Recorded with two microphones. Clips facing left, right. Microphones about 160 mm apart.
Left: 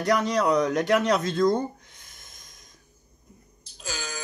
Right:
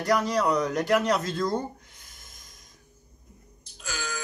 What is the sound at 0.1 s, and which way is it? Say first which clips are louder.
Speech: left 2 dB; 5° right (ahead or behind).